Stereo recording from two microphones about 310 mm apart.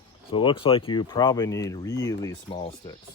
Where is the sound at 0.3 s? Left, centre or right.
Centre.